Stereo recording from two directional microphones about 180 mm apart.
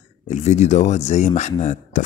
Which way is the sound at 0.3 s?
40° left (ahead or behind).